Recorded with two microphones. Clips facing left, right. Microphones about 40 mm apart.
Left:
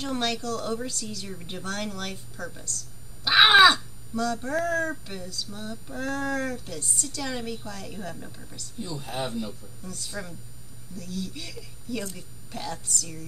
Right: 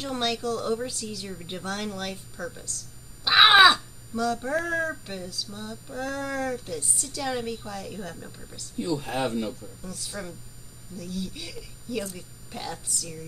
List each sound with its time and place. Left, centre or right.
0.0 s a woman's voice: centre
8.7 s speech: right
9.8 s a woman's voice: centre